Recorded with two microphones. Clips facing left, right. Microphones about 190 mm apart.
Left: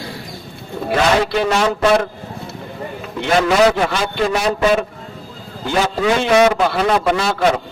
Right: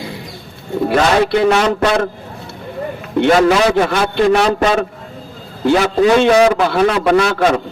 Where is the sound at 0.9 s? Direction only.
60° right (ahead or behind).